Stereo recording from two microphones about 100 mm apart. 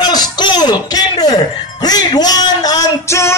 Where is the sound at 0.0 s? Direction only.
45° left (ahead or behind).